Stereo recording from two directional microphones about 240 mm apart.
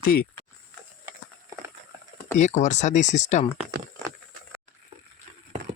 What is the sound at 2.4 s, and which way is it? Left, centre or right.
Speech, left.